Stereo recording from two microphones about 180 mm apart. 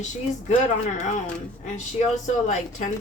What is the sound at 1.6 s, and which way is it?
A woman's voice, 40° left (ahead or behind).